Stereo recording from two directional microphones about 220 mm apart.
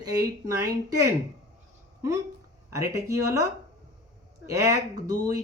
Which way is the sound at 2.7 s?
15° right (ahead or behind).